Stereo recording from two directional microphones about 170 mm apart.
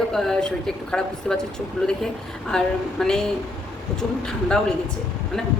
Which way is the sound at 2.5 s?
5° left (ahead or behind).